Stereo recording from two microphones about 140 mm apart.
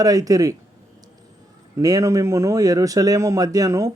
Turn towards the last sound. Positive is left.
turn(degrees=-20)  # may be behind; listen again after turning